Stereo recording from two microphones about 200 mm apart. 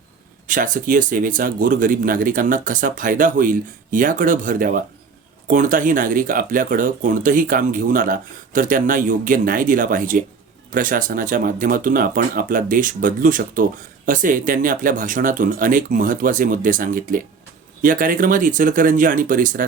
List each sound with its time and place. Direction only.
0.4 s speech: 40° right (ahead or behind)